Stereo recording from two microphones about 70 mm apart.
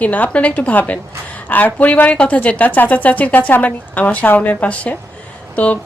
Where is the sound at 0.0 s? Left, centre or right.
Left.